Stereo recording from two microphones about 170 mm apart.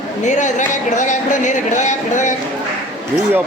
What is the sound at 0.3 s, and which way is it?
Speech, 45° left (ahead or behind).